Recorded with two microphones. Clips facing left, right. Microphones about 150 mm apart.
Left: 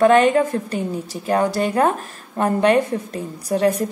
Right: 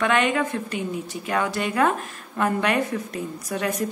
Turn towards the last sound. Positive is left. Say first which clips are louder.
# left 8 dB
turn(degrees=30)  # may be behind; listen again after turning